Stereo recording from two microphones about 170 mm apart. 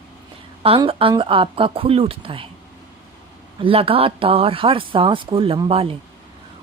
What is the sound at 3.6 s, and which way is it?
Speech, 35° right (ahead or behind).